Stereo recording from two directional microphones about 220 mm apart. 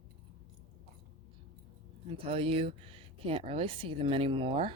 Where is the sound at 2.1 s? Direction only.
25° right (ahead or behind).